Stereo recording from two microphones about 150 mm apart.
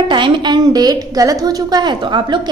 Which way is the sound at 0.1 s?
30° right (ahead or behind).